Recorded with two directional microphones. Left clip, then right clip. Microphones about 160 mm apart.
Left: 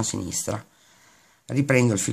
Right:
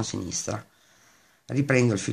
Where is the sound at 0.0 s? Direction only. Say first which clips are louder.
Left 2 dB; 20° left (ahead or behind).